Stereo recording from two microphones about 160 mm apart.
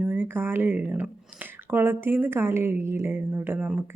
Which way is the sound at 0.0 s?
10° right (ahead or behind).